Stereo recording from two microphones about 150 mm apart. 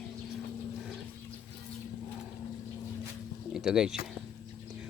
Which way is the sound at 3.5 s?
5° right (ahead or behind).